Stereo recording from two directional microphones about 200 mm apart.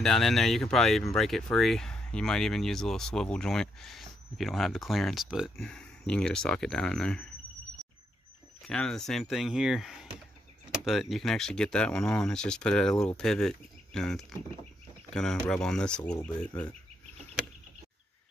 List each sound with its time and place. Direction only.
0.0 s speech: centre (ahead or behind)
8.6 s speech: 5° left (ahead or behind)